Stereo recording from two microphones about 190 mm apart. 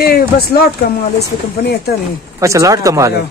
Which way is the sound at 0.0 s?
55° left (ahead or behind).